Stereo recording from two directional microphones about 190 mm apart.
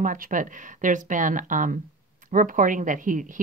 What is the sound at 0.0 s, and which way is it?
Speech, 45° right (ahead or behind).